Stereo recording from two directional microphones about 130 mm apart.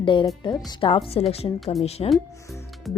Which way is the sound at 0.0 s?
40° left (ahead or behind).